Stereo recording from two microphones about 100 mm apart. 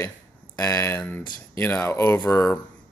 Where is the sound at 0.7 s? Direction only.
30° left (ahead or behind).